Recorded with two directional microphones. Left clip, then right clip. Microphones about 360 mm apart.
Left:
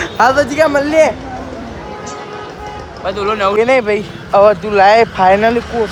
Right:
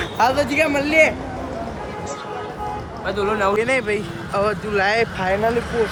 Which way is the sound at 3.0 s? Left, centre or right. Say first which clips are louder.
Left 5 dB; centre.